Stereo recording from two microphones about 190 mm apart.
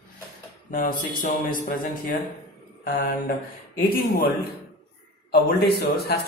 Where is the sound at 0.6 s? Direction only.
45° left (ahead or behind).